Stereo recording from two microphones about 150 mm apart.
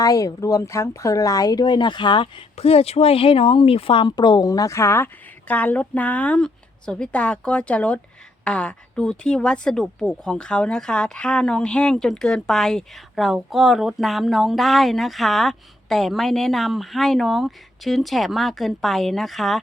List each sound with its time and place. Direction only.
0.0 s speech: 25° left (ahead or behind); by 19.5 s centre (ahead or behind)